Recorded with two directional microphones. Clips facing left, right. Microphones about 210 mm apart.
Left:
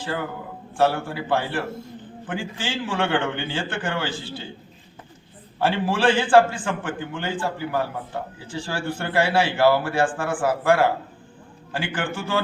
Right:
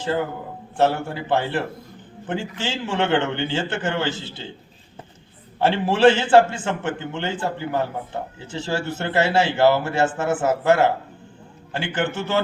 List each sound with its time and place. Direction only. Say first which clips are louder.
0.8 s speech: right 1 dB; 20° right (ahead or behind)
5.5 s speech: right 3 dB; 20° right (ahead or behind)